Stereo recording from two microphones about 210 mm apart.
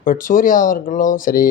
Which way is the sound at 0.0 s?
40° left (ahead or behind).